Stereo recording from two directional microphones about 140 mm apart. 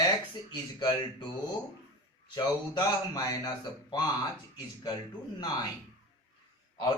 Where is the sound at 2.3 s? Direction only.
30° left (ahead or behind).